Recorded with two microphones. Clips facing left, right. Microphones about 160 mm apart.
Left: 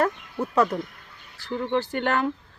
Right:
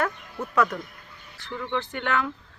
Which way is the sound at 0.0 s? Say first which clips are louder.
Left 4 dB; 30° left (ahead or behind).